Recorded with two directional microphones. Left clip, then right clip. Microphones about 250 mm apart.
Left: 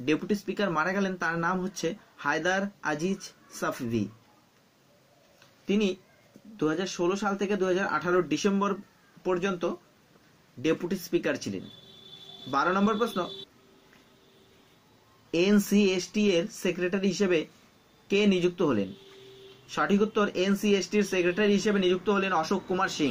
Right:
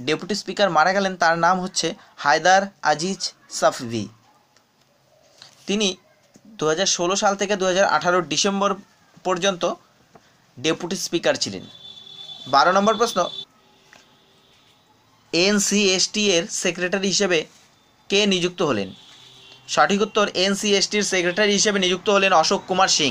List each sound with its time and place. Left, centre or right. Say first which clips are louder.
0.0 s speech: right 4 dB; centre
6.5 s speech: right 9 dB; right
15.3 s speech: right 6 dB; right